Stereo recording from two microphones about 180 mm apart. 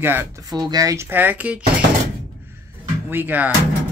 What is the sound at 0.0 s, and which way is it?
Speech, 10° right (ahead or behind).